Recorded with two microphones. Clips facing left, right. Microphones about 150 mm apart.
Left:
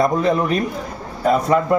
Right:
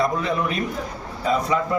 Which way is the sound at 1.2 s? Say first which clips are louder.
Left 6 dB; 55° left (ahead or behind).